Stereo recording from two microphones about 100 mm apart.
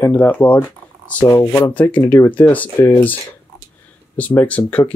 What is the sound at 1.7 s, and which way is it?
Speech, 20° left (ahead or behind).